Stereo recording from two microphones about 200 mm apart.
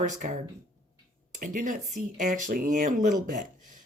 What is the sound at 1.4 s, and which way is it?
Speech, 40° right (ahead or behind).